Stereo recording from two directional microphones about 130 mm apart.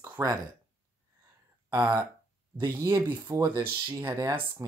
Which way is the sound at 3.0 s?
15° right (ahead or behind).